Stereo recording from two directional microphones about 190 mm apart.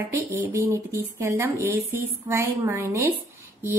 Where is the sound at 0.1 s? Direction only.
15° right (ahead or behind).